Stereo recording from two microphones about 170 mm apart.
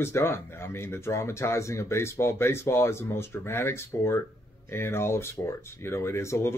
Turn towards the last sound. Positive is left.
turn(degrees=15)  # may be behind; listen again after turning